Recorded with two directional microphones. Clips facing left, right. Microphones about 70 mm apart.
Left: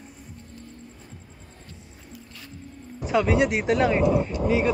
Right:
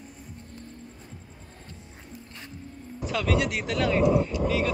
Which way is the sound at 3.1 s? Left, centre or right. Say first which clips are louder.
Left 8 dB; left.